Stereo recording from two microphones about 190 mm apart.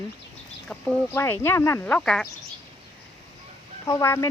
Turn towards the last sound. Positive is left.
turn(degrees=15)  # may be behind; listen again after turning